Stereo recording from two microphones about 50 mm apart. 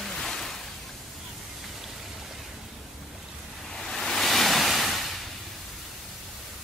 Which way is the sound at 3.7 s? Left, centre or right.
Centre.